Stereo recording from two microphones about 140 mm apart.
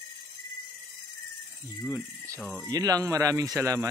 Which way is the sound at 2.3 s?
5° left (ahead or behind).